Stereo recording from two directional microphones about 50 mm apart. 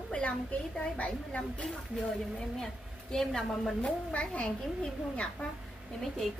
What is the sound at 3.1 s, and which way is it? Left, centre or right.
Speech, centre.